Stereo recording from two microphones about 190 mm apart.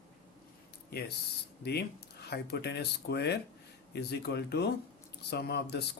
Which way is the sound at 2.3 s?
60° left (ahead or behind).